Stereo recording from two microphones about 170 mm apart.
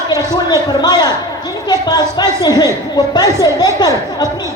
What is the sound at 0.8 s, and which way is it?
A woman's voice, 25° left (ahead or behind).